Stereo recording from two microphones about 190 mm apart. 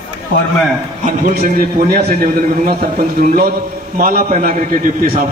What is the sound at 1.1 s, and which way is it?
A man's voice, 45° right (ahead or behind).